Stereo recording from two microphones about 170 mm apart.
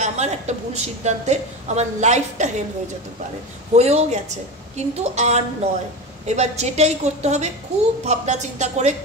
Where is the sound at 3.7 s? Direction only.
40° right (ahead or behind).